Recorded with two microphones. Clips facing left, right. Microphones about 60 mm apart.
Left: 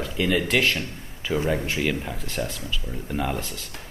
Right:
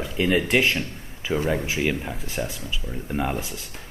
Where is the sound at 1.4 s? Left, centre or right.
Centre.